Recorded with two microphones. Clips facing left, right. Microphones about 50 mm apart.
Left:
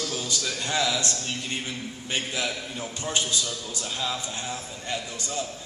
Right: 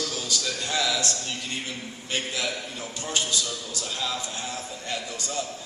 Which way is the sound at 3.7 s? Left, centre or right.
Centre.